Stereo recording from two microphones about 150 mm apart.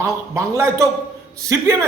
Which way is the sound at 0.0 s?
20° right (ahead or behind).